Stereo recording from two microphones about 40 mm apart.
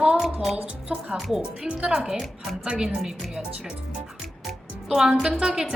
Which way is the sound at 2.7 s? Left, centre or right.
Centre.